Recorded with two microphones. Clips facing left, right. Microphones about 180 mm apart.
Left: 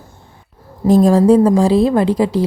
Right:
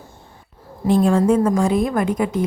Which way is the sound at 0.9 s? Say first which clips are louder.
Left 5 dB; 40° left (ahead or behind).